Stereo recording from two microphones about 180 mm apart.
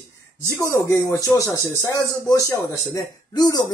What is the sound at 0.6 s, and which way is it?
Speech, 15° left (ahead or behind).